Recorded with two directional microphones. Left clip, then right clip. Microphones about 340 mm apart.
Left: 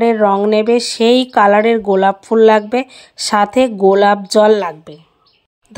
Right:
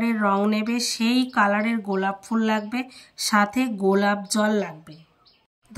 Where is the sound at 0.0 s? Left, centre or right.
Centre.